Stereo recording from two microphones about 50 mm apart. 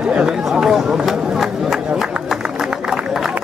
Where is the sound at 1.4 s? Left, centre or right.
Centre.